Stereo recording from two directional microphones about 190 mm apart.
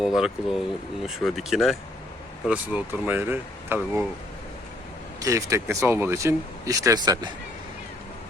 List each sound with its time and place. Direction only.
0.0 s speech: centre (ahead or behind)
5.2 s speech: 15° right (ahead or behind)